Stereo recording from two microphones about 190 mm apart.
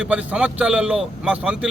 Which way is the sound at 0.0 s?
5° right (ahead or behind).